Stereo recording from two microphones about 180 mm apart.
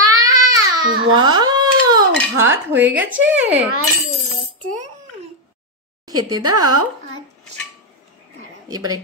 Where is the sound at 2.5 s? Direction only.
10° right (ahead or behind).